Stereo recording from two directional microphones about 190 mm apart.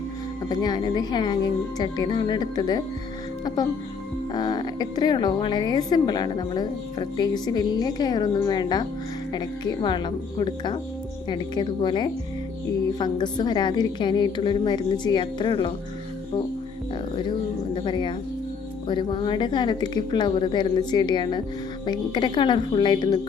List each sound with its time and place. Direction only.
0.4 s a woman's voice: 20° left (ahead or behind)
17.7 s a woman's voice: 25° left (ahead or behind)